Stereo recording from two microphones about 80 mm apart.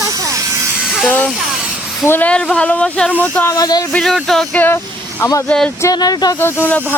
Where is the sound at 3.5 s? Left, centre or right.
Left.